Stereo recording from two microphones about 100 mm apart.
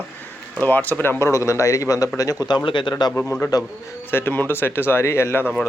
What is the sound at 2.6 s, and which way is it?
Speech, 50° left (ahead or behind).